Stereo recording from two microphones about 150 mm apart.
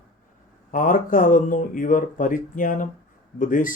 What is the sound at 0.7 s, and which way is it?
Speech, 60° left (ahead or behind).